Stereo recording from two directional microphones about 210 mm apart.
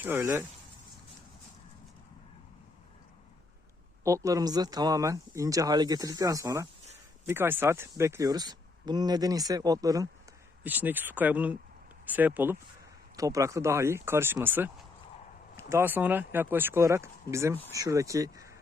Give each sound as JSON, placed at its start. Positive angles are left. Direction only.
{"t": 0.0, "sound": "speech", "side_deg": -10}
{"t": 4.0, "sound": "speech", "side_deg": -15}